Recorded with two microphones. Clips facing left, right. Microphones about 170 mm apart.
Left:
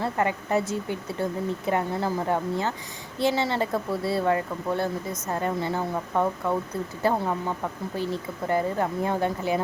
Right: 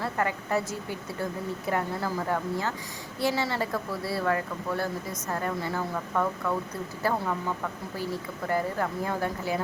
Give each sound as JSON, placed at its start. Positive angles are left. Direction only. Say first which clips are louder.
{"t": 0.0, "sound": "a woman's voice", "louder": "left 3 dB", "side_deg": 20}